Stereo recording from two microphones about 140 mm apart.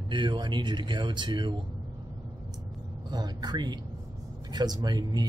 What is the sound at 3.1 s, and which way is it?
Speech, 30° right (ahead or behind).